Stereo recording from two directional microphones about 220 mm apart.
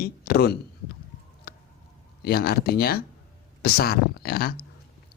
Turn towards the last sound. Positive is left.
turn(degrees=45)  # may be behind; listen again after turning